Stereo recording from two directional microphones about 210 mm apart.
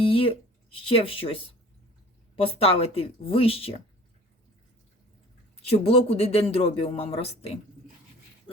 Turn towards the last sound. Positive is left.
turn(degrees=30)  # may be behind; listen again after turning